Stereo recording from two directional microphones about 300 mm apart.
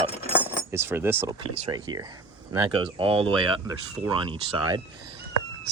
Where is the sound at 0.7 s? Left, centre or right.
Centre.